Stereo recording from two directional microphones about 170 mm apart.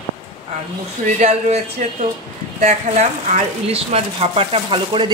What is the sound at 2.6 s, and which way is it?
Speech, 45° right (ahead or behind).